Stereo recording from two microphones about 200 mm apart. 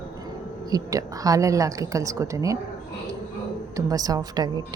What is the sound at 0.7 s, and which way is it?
A woman's voice, 15° right (ahead or behind).